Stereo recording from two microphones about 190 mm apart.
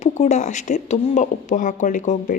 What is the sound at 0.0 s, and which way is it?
A woman's voice, 35° left (ahead or behind).